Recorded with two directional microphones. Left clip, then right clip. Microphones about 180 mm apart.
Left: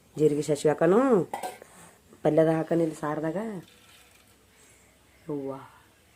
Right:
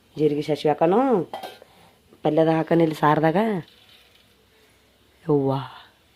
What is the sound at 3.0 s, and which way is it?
Speech, 55° right (ahead or behind).